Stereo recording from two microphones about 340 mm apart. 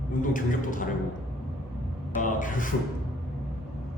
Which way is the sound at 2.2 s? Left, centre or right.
Left.